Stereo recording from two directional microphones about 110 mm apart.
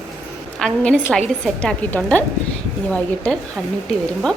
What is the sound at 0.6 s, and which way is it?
A woman's voice, 10° left (ahead or behind).